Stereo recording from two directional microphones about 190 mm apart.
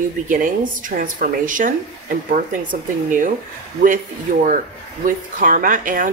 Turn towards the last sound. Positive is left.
turn(degrees=-45)  # may be behind; listen again after turning